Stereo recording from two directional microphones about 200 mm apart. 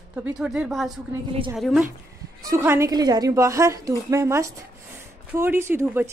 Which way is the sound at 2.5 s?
15° right (ahead or behind).